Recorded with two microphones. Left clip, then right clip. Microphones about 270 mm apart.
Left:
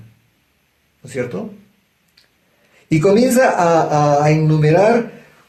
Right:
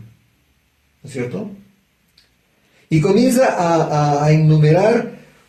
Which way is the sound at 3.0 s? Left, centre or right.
Left.